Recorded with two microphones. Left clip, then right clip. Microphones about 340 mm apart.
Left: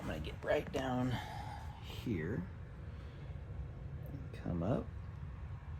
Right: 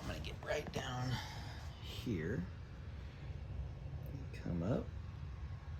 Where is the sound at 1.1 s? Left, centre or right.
Centre.